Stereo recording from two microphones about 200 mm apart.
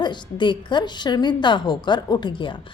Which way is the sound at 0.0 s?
20° left (ahead or behind).